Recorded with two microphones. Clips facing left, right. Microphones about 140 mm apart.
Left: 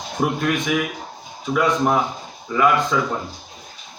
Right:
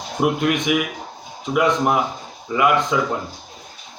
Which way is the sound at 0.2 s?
15° right (ahead or behind).